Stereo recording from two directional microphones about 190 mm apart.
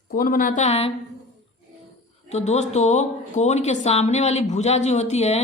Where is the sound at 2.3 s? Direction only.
35° left (ahead or behind).